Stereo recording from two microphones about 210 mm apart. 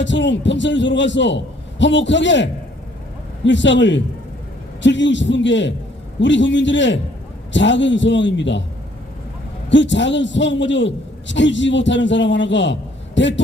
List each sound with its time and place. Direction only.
0.0 s a man's voice: 60° left (ahead or behind)
9.6 s a man's voice: 60° left (ahead or behind)